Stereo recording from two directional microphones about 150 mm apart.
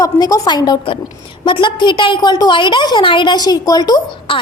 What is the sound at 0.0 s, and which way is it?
A woman's voice, 25° left (ahead or behind).